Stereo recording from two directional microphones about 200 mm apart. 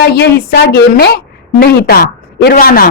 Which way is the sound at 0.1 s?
55° left (ahead or behind).